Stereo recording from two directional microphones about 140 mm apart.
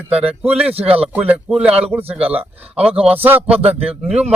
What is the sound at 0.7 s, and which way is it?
Speech, 45° right (ahead or behind).